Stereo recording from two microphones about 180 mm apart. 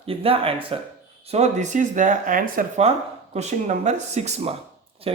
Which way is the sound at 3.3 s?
40° right (ahead or behind).